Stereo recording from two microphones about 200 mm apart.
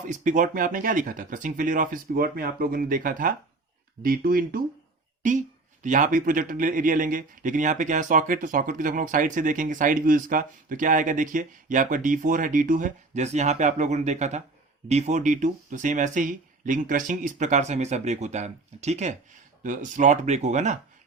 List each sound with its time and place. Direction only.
0.1 s speech: 40° right (ahead or behind)